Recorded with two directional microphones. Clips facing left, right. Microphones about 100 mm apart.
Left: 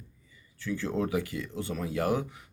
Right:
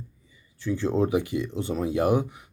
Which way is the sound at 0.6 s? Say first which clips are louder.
Right 6 dB; 25° right (ahead or behind).